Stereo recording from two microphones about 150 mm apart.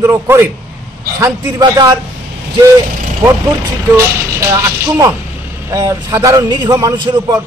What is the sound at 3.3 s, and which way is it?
A man's voice, 20° right (ahead or behind).